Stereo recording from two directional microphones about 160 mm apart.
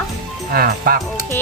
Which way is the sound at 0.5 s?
70° right (ahead or behind).